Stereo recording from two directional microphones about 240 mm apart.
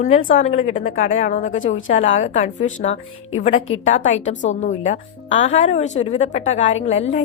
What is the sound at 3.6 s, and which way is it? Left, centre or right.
Speech, left.